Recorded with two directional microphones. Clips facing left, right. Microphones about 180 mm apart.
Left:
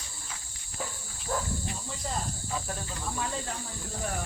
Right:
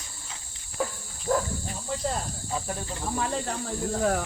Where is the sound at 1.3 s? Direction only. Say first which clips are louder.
Right 7 dB; 50° right (ahead or behind).